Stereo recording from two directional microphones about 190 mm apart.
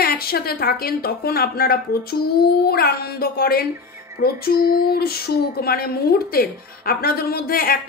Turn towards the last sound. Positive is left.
turn(degrees=50)  # may be behind; listen again after turning